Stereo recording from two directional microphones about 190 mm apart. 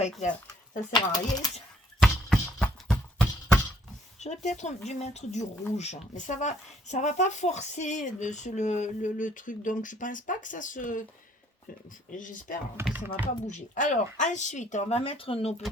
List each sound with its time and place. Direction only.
0.0 s a sound: 40° left (ahead or behind)
1.1 s speech: 20° left (ahead or behind)
2.0 s a sound: 5° left (ahead or behind)
4.2 s speech: 40° left (ahead or behind)
12.1 s speech: 45° left (ahead or behind)
12.8 s speech: 10° right (ahead or behind)
13.5 s speech: 40° left (ahead or behind)